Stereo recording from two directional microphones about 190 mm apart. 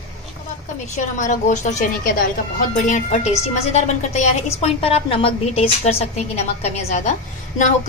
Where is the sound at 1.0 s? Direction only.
40° left (ahead or behind).